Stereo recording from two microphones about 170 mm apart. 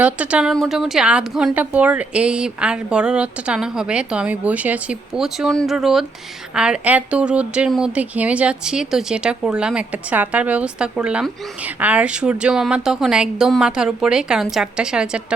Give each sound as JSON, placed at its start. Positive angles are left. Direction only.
{"t": 0.0, "sound": "a woman's voice", "side_deg": -10}